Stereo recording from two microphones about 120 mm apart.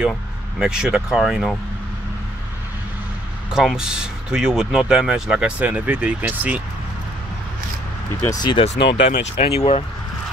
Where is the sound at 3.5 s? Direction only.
5° right (ahead or behind).